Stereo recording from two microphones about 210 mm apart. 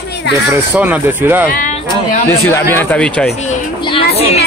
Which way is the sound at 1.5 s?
40° left (ahead or behind).